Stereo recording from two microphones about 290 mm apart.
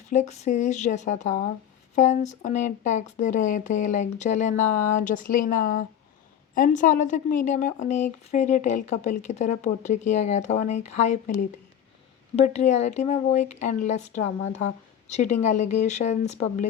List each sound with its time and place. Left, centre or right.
0.1 s a woman's voice: left